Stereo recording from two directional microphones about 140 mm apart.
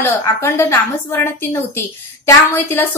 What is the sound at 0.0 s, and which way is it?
A woman's voice, 20° left (ahead or behind).